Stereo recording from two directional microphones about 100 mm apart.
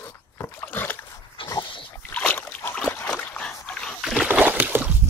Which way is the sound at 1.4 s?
60° left (ahead or behind).